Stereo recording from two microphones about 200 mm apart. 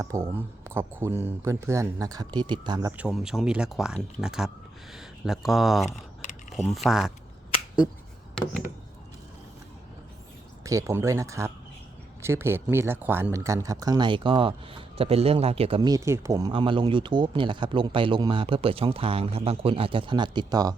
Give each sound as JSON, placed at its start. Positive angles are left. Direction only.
{"t": 0.0, "sound": "speech", "side_deg": -15}
{"t": 3.0, "sound": "speech", "side_deg": 0}
{"t": 8.4, "sound": "speech", "side_deg": 0}
{"t": 10.6, "sound": "speech", "side_deg": -15}